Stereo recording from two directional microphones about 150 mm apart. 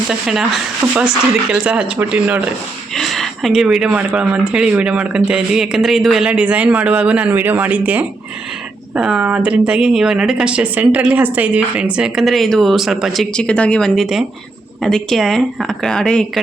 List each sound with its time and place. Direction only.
0.1 s speech: 5° right (ahead or behind)
2.9 s speech: centre (ahead or behind)